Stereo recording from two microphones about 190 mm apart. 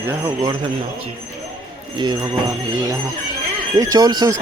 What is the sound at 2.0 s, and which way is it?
Speech, 25° right (ahead or behind).